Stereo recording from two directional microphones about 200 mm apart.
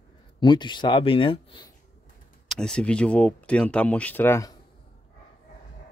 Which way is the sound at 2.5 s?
5° left (ahead or behind).